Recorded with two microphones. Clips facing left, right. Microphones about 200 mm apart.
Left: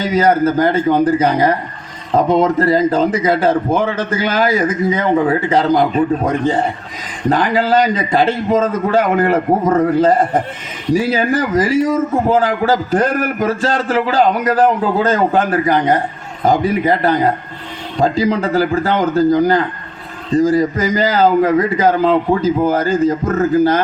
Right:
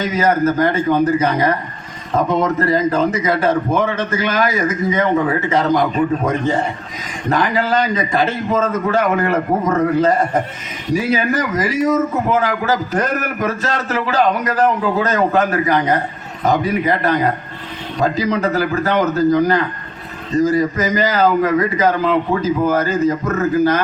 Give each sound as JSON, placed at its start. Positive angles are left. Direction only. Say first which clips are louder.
{"t": 0.0, "sound": "a man's voice", "louder": "left 3 dB", "side_deg": 30}